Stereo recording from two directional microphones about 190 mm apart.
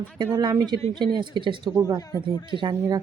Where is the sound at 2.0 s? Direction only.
20° left (ahead or behind).